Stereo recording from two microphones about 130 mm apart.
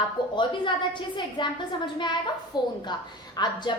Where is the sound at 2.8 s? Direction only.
35° left (ahead or behind).